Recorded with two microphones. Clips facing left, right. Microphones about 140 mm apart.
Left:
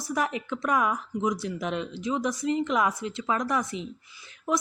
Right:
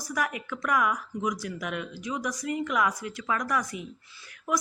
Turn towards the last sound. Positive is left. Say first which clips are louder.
# left 2 dB
turn(degrees=25)  # may be behind; listen again after turning